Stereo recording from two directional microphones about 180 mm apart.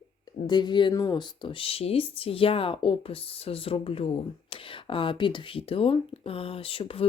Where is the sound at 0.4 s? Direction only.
25° left (ahead or behind).